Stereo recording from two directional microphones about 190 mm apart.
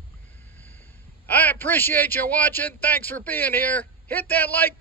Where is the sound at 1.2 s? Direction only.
10° left (ahead or behind).